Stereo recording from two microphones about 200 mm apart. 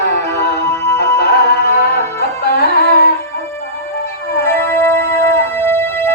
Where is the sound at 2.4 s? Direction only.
50° left (ahead or behind).